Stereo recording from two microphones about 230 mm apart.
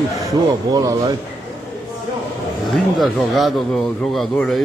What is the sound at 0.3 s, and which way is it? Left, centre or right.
Speech, centre.